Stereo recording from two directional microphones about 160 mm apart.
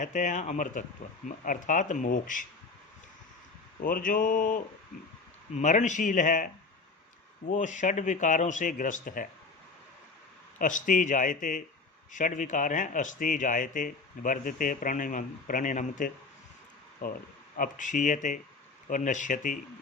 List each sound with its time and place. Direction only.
0.0 s a man's voice: 50° left (ahead or behind)
3.8 s a man's voice: 60° left (ahead or behind)
10.6 s a man's voice: 55° left (ahead or behind)
17.6 s a man's voice: 55° left (ahead or behind)